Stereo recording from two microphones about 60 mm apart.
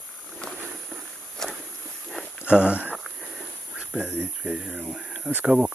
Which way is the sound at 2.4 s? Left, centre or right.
Centre.